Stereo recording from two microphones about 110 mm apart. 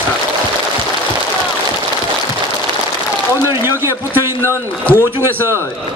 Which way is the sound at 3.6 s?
20° right (ahead or behind).